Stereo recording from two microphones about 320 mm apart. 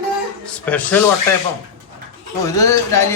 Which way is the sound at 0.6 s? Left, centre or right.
Centre.